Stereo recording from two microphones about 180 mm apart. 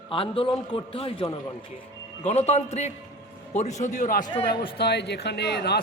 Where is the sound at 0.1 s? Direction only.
30° left (ahead or behind); by 4.3 s 45° left (ahead or behind).